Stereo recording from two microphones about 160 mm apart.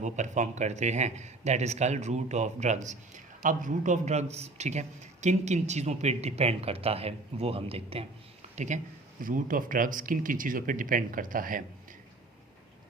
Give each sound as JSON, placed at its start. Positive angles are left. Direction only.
{"t": 0.0, "sound": "a man's voice", "side_deg": -50}
{"t": 8.5, "sound": "speech", "side_deg": -50}
{"t": 9.2, "sound": "speech", "side_deg": -60}